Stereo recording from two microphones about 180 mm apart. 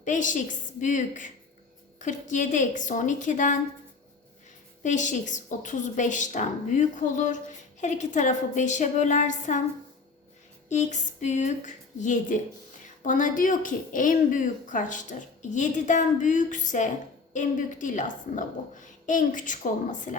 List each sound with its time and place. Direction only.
0.0 s a woman's voice: 45° left (ahead or behind)
4.8 s a woman's voice: 45° left (ahead or behind)
10.7 s a woman's voice: 40° left (ahead or behind)